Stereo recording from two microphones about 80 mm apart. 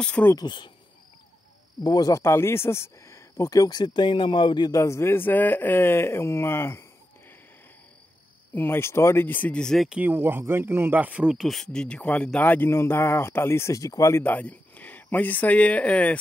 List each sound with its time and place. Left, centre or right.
0.0 s speech: centre
1.8 s speech: left
2.2 s speech: left
4.7 s speech: left
8.5 s speech: left
9.6 s speech: centre
10.0 s speech: right
11.0 s speech: centre
11.3 s speech: centre; by 14.2 s left
14.2 s speech: centre